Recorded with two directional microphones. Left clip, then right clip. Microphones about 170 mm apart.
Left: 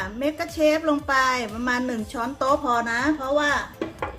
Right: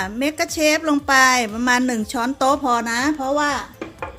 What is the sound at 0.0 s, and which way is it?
A woman's voice, 50° right (ahead or behind).